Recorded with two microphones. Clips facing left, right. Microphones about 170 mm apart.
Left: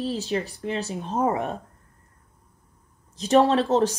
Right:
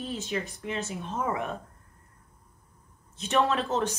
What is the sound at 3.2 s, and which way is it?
Speech, 35° left (ahead or behind).